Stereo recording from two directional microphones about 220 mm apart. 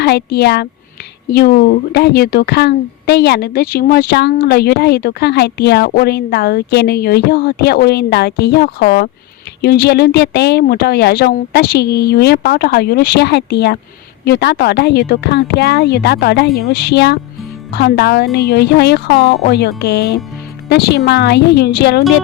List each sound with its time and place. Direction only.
0.0 s speech: 50° left (ahead or behind)